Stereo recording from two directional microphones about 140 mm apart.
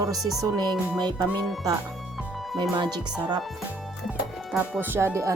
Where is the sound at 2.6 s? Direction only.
30° right (ahead or behind).